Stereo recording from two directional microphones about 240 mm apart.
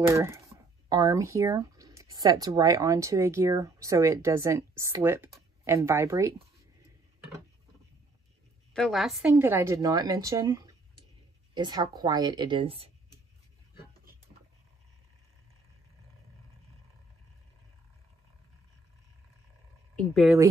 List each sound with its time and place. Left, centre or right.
0.1 s speech: centre
8.7 s a woman's voice: centre; by 12.9 s right
20.0 s a woman's voice: centre